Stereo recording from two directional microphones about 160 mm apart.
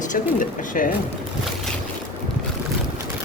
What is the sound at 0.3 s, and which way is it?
Speech, 55° left (ahead or behind).